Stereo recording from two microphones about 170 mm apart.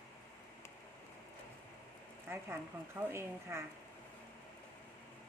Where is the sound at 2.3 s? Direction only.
15° right (ahead or behind).